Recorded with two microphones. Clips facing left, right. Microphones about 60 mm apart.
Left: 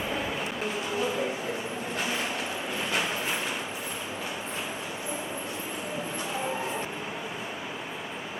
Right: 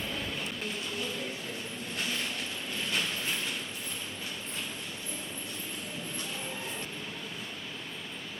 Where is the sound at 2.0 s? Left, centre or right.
Centre.